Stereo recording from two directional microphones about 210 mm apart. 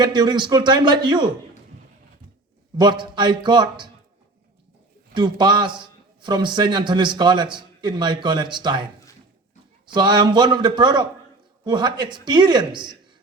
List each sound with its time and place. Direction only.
0.0 s a man's voice: 20° right (ahead or behind)
2.7 s a man's voice: 20° right (ahead or behind)
5.1 s a man's voice: 20° right (ahead or behind)